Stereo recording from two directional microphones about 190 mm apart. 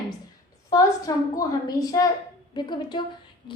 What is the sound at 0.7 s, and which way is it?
A woman's voice, 20° left (ahead or behind).